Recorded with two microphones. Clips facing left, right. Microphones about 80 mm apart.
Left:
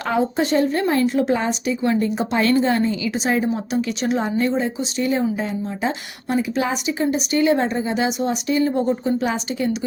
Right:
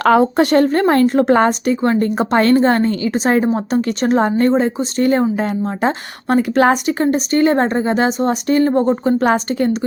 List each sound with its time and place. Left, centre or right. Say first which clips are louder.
0.0 s speech: right 8 dB; right